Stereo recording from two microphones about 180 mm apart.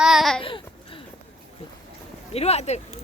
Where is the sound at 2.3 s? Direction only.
35° left (ahead or behind).